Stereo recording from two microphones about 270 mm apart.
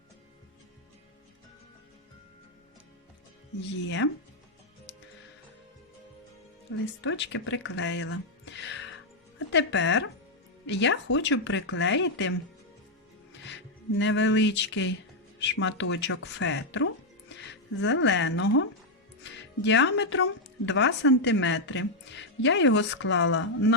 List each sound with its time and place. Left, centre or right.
3.6 s speech: left
6.7 s speech: left